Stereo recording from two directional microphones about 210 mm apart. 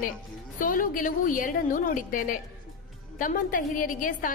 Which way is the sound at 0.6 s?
40° left (ahead or behind).